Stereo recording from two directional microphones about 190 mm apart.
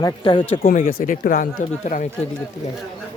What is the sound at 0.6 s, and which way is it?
Speech, 50° left (ahead or behind).